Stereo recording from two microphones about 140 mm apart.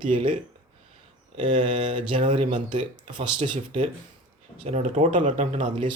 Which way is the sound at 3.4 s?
40° right (ahead or behind).